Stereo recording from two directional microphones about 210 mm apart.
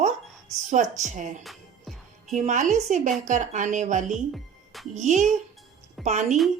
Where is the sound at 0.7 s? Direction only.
35° right (ahead or behind).